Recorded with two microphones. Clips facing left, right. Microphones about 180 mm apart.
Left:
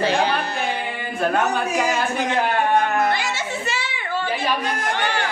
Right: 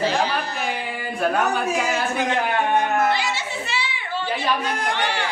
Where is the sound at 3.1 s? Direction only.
50° left (ahead or behind).